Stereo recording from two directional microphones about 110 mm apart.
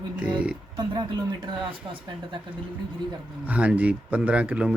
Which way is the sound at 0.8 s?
40° right (ahead or behind).